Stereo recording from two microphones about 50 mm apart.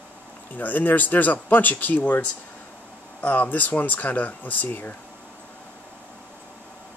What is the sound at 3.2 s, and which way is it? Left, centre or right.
Speech, left.